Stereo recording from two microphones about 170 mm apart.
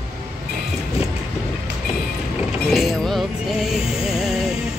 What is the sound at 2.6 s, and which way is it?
Music, centre (ahead or behind).